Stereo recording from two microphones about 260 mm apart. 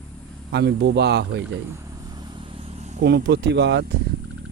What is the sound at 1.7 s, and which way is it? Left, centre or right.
Vehicle, centre.